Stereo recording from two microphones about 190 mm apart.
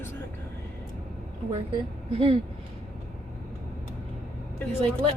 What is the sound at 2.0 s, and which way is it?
Speech, 30° right (ahead or behind).